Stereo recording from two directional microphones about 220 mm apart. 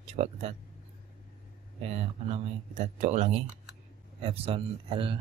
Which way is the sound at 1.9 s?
30° right (ahead or behind).